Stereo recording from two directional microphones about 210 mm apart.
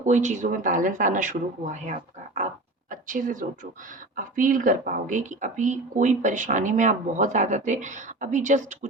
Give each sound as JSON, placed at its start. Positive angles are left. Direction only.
{"t": 0.0, "sound": "speech", "side_deg": -35}
{"t": 2.9, "sound": "a sound", "side_deg": -40}
{"t": 4.2, "sound": "speech", "side_deg": -40}